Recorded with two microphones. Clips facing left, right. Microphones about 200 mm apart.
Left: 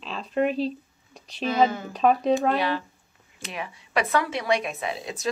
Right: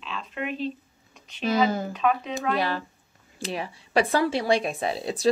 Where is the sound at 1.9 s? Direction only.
35° left (ahead or behind).